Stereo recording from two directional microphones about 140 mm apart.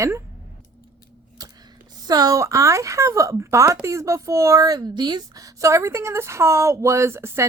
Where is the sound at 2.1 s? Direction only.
25° right (ahead or behind).